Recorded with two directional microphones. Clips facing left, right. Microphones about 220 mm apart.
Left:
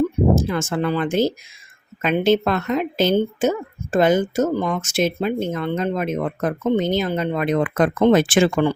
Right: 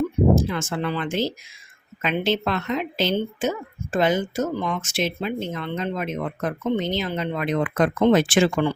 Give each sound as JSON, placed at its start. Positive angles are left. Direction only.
{"t": 0.4, "sound": "speech", "side_deg": 45}